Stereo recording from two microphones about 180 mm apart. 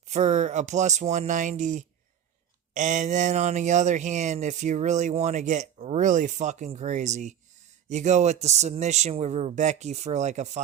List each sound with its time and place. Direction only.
0.1 s speech: 40° right (ahead or behind)